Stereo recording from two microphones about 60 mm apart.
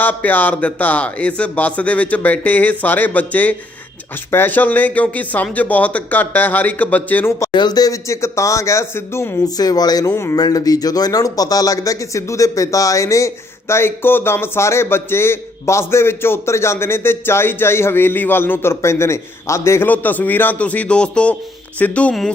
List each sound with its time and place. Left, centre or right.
0.0 s speech: left
7.3 s speech: left
9.4 s speech: left
19.9 s speech: left